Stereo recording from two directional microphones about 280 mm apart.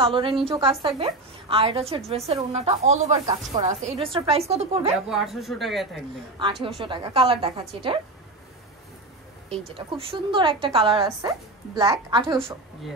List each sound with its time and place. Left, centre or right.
0.0 s a woman's voice: centre
4.9 s speech: centre
6.4 s speech: centre
9.8 s speech: centre